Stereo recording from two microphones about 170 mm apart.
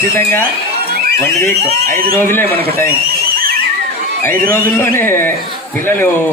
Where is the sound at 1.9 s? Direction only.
60° right (ahead or behind).